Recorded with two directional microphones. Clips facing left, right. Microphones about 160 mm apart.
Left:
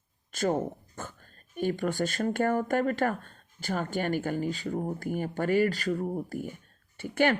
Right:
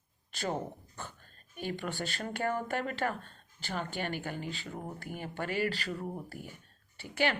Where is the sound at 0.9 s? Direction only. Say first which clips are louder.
Left 4 dB; 45° left (ahead or behind).